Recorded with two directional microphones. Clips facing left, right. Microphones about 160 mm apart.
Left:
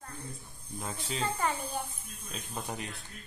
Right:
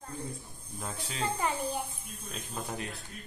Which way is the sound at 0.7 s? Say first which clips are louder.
Left 2 dB; centre (ahead or behind).